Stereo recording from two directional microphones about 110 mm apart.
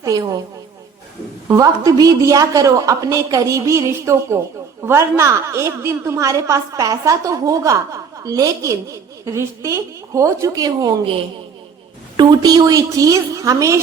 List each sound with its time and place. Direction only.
0.0 s a woman's voice: 35° right (ahead or behind)
1.5 s a woman's voice: 30° right (ahead or behind)
12.1 s a woman's voice: 40° right (ahead or behind)